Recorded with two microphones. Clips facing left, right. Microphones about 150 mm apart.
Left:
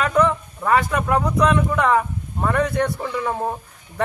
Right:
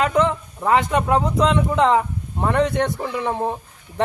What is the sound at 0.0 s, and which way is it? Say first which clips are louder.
A man's voice: even; 20° right (ahead or behind).